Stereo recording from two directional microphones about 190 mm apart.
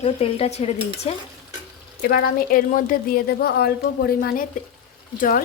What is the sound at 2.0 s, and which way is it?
A woman's voice, 55° left (ahead or behind).